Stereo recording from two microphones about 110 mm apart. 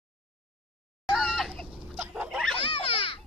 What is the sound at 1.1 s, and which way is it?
Chicken, centre (ahead or behind).